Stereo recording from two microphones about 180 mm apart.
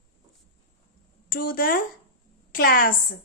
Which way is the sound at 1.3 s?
55° left (ahead or behind).